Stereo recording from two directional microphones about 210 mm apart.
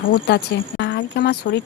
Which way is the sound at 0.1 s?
50° left (ahead or behind).